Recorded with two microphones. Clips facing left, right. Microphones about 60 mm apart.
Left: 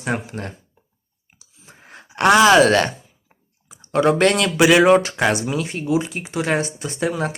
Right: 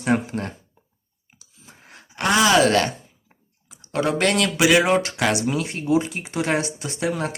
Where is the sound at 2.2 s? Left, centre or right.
Left.